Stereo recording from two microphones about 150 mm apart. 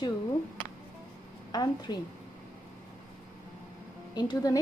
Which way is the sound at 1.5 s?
30° left (ahead or behind).